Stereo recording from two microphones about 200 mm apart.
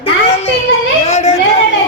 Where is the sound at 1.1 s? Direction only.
35° left (ahead or behind).